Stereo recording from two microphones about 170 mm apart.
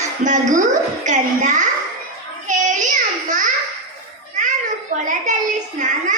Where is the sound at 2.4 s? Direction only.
50° right (ahead or behind).